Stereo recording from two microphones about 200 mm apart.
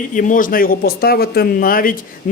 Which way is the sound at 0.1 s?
40° left (ahead or behind).